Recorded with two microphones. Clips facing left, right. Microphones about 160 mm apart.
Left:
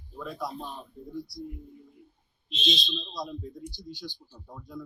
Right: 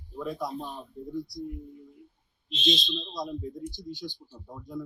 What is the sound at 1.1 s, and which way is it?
Speech, 50° right (ahead or behind).